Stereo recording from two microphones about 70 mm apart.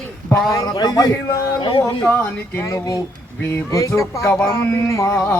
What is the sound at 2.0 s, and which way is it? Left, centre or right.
Speech, left.